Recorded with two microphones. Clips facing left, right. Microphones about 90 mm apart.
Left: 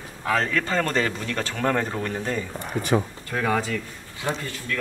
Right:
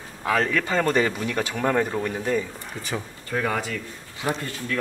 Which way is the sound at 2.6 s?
60° left (ahead or behind).